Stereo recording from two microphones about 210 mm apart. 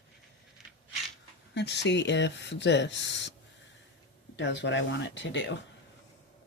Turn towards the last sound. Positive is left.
turn(degrees=60)  # may be behind; listen again after turning